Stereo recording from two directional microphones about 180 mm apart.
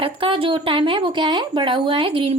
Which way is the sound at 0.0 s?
30° right (ahead or behind).